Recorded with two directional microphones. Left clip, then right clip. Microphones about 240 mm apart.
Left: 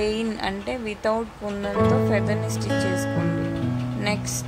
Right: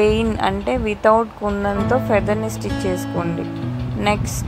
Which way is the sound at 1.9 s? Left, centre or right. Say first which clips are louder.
Right 7 dB; centre.